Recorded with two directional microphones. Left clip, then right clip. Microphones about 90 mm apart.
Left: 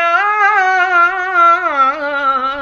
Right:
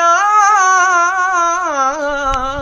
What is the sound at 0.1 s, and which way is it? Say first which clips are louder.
Music: right 2 dB; 40° right (ahead or behind).